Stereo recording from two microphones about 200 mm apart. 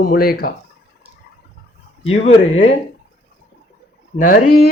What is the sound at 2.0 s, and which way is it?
Speech, 30° left (ahead or behind).